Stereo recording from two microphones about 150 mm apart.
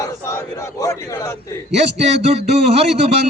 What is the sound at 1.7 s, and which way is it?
A man's voice, 45° right (ahead or behind).